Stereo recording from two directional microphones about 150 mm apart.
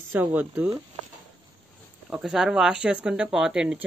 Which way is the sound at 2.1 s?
5° right (ahead or behind).